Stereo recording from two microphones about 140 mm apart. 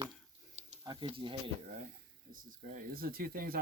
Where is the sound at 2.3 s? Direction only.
80° right.